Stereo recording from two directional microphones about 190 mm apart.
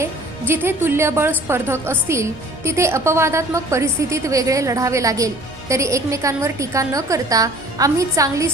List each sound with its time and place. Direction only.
0.0 s a woman's voice: 10° right (ahead or behind)